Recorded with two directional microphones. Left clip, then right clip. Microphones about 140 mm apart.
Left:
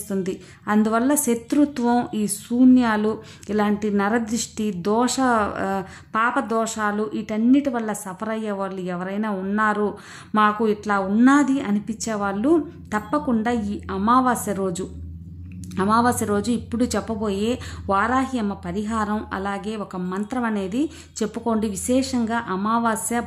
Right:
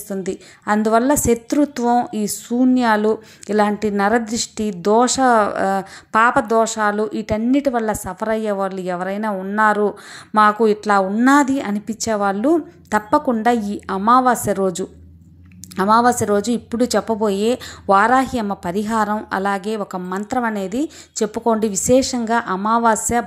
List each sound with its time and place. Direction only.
0.1 s speech: 25° right (ahead or behind)
9.3 s speech: 15° right (ahead or behind)
9.6 s a woman's voice: 30° right (ahead or behind)